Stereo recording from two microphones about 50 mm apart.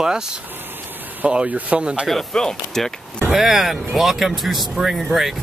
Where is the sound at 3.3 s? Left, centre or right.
Centre.